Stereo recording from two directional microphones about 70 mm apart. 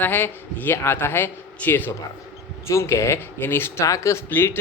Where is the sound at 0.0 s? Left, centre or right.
Left.